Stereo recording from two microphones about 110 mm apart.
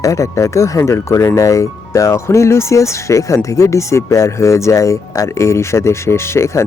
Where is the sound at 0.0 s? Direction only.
30° left (ahead or behind).